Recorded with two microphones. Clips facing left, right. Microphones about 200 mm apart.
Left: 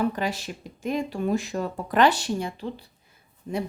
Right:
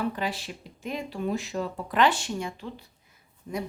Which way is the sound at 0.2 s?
45° left (ahead or behind).